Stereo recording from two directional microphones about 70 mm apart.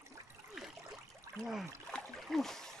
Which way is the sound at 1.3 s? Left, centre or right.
Right.